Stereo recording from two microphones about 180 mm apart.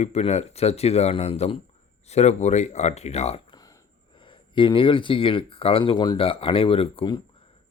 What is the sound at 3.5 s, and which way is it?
Speech, 20° left (ahead or behind).